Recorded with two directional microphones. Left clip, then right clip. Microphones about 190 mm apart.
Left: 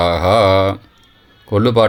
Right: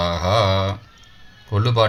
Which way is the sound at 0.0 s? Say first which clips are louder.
Left 7 dB; 45° left (ahead or behind).